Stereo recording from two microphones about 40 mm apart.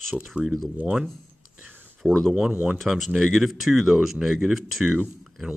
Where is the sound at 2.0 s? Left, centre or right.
Right.